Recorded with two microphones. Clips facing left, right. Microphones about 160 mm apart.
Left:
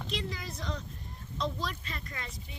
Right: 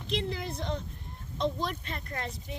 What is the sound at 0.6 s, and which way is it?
Speech, 25° right (ahead or behind).